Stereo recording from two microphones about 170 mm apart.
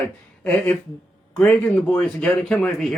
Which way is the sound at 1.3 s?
5° left (ahead or behind).